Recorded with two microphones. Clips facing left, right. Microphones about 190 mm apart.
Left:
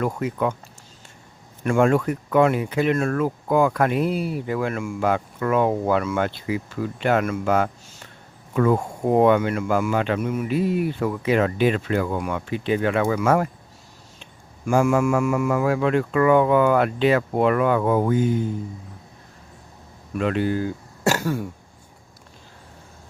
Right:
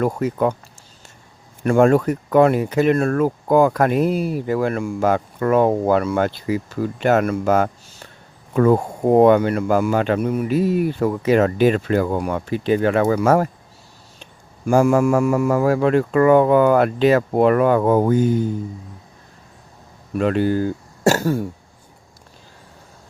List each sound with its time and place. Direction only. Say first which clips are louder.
0.0 s speech: right 4 dB; 40° right (ahead or behind)
1.6 s speech: right 4 dB; 40° right (ahead or behind)
14.7 s speech: right 4 dB; 40° right (ahead or behind)
20.1 s speech: right 4 dB; 40° right (ahead or behind)